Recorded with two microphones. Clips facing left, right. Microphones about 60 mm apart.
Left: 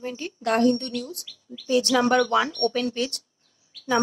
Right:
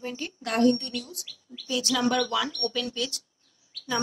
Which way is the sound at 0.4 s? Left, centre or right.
Left.